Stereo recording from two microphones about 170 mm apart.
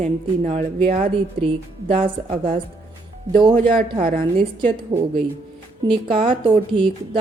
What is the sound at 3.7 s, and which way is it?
Speech, 55° right (ahead or behind).